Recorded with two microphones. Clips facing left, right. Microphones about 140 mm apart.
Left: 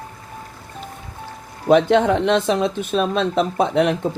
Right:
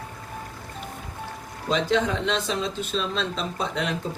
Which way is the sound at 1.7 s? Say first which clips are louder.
Left 9 dB; 60° left (ahead or behind).